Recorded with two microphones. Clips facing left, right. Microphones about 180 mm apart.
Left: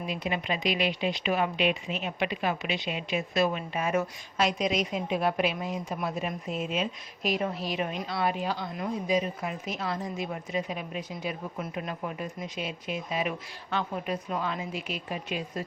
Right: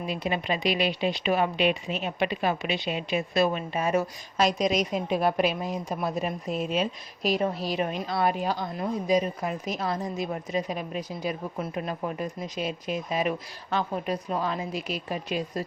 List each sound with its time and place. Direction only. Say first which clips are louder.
0.1 s speech: right 3 dB; 35° right (ahead or behind)